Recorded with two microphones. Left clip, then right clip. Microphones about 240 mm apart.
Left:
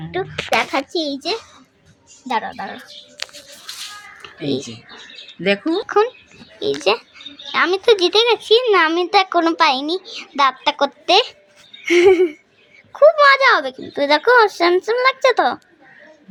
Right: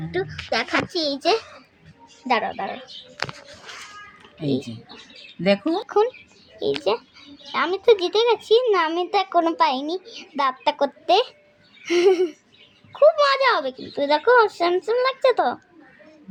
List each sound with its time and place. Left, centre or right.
0.1 s a child's voice: centre
2.5 s speech: centre
3.2 s a sound: left
4.4 s a child's voice: centre
5.4 s speech: right
6.6 s a child's voice: centre